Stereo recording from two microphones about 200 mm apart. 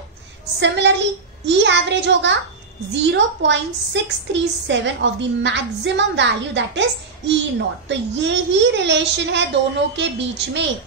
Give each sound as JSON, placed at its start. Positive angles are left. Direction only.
{"t": 0.6, "sound": "a woman's voice", "side_deg": -60}